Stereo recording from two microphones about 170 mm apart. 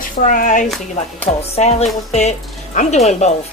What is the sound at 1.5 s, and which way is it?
Speech, 40° left (ahead or behind).